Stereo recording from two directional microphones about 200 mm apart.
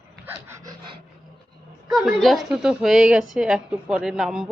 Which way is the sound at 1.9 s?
Centre (ahead or behind).